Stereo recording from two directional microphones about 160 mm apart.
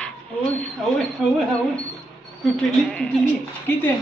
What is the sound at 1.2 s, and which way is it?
Speech, 5° right (ahead or behind).